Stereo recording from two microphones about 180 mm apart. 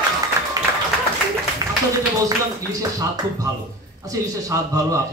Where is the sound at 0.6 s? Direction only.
20° right (ahead or behind).